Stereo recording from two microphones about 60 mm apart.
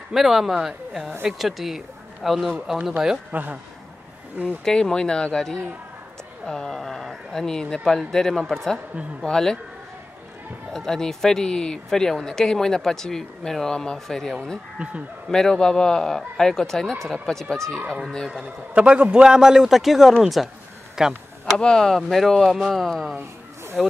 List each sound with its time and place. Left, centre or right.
0.1 s speech: centre
3.3 s speech: right
4.6 s speech: centre
10.7 s speech: centre
14.8 s speech: centre
15.2 s speech: centre
18.4 s a man's voice: centre
21.5 s speech: centre